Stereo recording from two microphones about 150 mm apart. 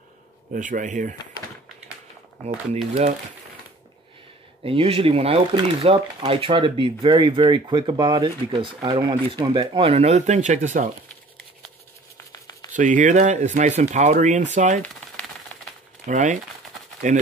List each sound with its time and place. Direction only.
0.5 s speech: 60° right (ahead or behind)
2.9 s speech: 50° right (ahead or behind)
4.6 s speech: 40° right (ahead or behind)
12.7 s speech: 60° right (ahead or behind)
16.1 s speech: 55° right (ahead or behind)